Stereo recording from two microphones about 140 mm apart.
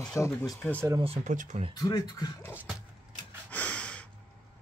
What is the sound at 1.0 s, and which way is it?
Speech, 45° right (ahead or behind).